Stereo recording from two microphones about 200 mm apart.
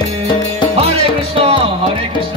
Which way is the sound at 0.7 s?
30° right (ahead or behind).